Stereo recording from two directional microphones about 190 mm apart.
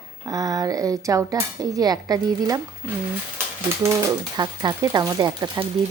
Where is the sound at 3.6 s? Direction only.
15° right (ahead or behind).